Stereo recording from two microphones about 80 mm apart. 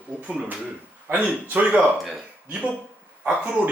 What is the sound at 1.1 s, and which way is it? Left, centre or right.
Speech, centre.